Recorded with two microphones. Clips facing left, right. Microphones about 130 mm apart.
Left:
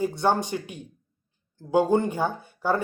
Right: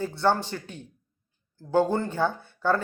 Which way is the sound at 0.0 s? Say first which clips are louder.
Left 1 dB; 15° left (ahead or behind).